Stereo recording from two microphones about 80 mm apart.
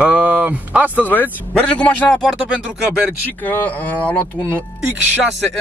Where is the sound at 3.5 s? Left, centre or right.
Left.